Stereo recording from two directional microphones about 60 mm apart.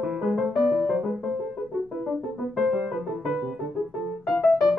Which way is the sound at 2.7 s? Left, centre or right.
Right.